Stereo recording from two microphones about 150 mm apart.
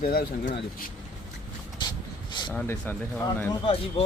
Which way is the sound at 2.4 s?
30° left (ahead or behind).